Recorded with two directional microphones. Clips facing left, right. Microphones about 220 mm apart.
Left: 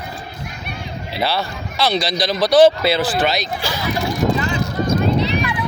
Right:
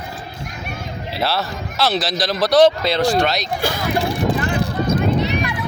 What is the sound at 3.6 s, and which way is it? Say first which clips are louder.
Speech: right 3 dB; 55° right (ahead or behind).